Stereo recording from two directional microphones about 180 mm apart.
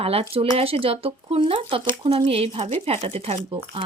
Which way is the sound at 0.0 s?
35° right (ahead or behind).